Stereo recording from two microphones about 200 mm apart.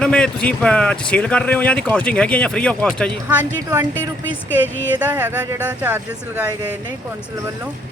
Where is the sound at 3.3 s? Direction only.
10° right (ahead or behind).